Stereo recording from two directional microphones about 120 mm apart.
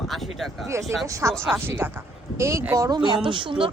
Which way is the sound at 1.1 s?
25° right (ahead or behind).